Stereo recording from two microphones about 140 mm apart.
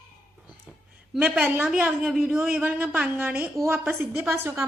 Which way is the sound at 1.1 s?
10° right (ahead or behind).